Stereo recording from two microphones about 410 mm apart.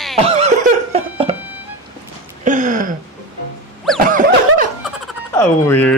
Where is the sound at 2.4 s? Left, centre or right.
Centre.